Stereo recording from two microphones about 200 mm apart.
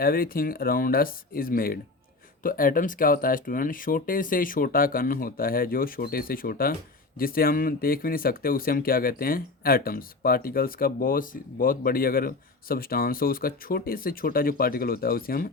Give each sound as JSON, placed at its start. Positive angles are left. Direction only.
{"t": 0.0, "sound": "speech", "side_deg": 45}